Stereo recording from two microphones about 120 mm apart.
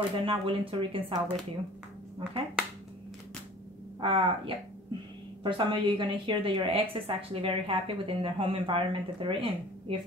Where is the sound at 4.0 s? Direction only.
50° right (ahead or behind).